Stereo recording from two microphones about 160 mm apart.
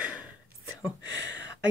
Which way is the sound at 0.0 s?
10° right (ahead or behind).